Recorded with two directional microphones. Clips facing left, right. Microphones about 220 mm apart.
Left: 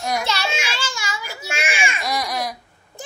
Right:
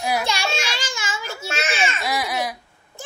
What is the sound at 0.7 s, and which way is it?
Baby cry, 15° right (ahead or behind).